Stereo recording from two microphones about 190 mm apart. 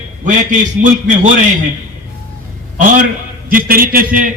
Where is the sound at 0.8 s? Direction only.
40° right (ahead or behind).